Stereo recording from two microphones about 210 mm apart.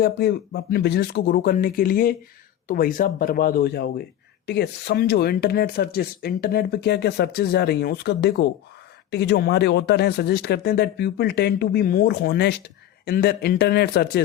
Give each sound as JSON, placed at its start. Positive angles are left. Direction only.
{"t": 0.0, "sound": "speech", "side_deg": 50}